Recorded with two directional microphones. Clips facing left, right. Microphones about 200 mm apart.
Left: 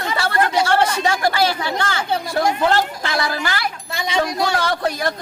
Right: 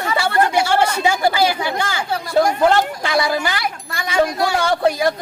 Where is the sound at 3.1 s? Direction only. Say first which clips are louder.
Right 4 dB; 15° right (ahead or behind).